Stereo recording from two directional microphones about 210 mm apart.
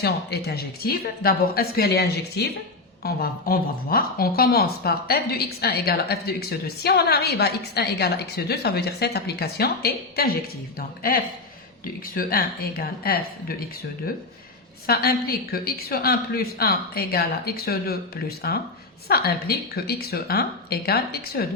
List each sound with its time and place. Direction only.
0.0 s a woman's voice: 50° left (ahead or behind)
14.8 s a woman's voice: 45° left (ahead or behind)